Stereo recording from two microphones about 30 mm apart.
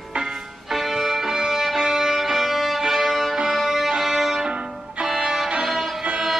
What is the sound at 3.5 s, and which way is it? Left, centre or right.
Music, centre.